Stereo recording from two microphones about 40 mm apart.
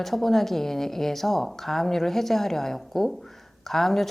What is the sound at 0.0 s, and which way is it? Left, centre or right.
A woman's voice, centre.